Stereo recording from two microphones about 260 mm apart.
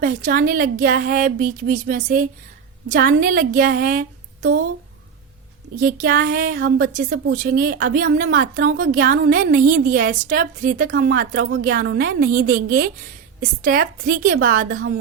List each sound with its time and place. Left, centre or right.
0.0 s a woman's voice: right
5.8 s a woman's voice: right